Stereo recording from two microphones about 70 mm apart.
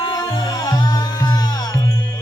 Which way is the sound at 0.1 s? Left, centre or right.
Left.